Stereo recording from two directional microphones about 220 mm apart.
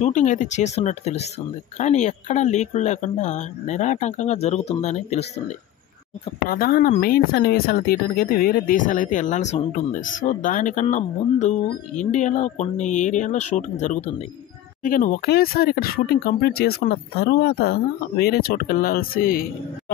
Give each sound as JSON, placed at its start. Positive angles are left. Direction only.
{"t": 0.0, "sound": "speech", "side_deg": 35}
{"t": 6.5, "sound": "speech", "side_deg": 40}